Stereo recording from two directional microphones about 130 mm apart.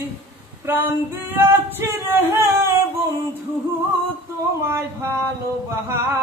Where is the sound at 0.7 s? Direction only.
15° right (ahead or behind).